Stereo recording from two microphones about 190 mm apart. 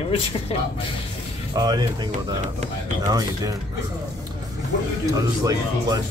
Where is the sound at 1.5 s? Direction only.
20° right (ahead or behind).